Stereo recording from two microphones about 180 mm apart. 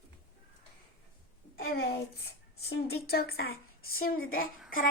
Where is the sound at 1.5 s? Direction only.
60° left (ahead or behind).